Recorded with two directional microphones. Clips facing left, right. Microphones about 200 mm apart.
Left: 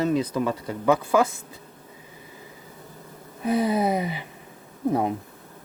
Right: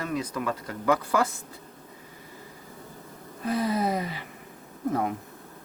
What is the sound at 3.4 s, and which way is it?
Speech, 20° left (ahead or behind).